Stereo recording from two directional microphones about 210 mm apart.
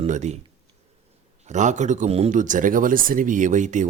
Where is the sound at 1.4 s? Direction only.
35° right (ahead or behind).